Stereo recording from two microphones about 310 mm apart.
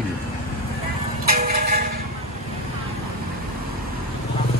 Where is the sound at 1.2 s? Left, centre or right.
Right.